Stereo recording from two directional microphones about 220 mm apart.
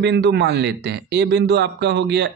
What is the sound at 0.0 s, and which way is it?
A man's voice, 50° right (ahead or behind).